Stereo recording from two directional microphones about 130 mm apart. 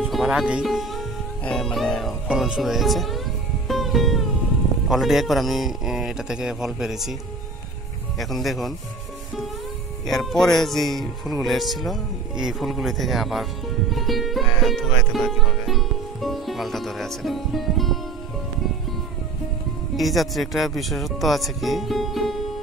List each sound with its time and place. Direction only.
0.0 s speech: 5° right (ahead or behind)
3.6 s music: centre (ahead or behind)
4.8 s speech: centre (ahead or behind)
8.2 s speech: centre (ahead or behind)
10.0 s speech: centre (ahead or behind)
20.0 s speech: centre (ahead or behind)